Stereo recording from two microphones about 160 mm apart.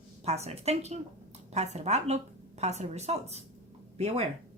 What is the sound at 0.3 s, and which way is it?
A woman's voice, 40° right (ahead or behind).